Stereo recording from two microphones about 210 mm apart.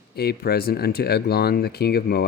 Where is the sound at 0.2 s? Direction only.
50° left (ahead or behind).